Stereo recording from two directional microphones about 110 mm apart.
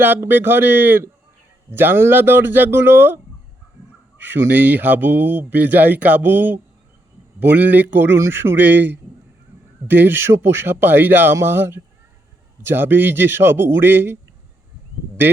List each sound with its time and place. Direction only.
0.0 s a man's voice: 20° right (ahead or behind)
4.2 s a man's voice: 20° right (ahead or behind)